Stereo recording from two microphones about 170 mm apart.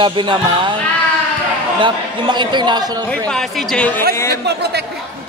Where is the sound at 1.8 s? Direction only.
25° right (ahead or behind).